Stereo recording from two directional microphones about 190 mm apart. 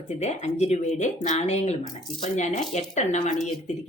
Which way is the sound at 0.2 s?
35° left (ahead or behind).